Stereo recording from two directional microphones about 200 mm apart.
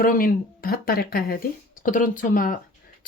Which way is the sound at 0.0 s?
45° left (ahead or behind).